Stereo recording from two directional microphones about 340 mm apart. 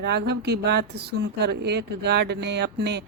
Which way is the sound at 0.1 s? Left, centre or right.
Right.